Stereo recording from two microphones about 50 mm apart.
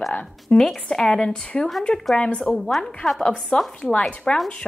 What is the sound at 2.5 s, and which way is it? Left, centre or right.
Speech, centre.